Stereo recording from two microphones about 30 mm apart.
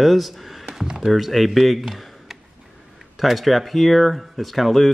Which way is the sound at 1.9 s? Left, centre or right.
Centre.